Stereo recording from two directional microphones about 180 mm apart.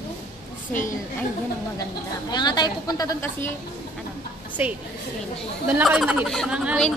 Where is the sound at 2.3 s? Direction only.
25° left (ahead or behind).